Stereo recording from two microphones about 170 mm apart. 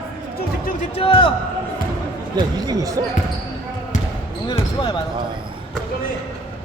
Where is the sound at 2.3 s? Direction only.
25° right (ahead or behind).